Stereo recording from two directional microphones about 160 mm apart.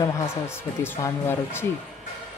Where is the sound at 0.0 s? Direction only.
15° left (ahead or behind).